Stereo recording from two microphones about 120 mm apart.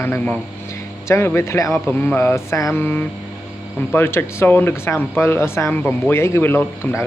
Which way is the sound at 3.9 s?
20° left (ahead or behind).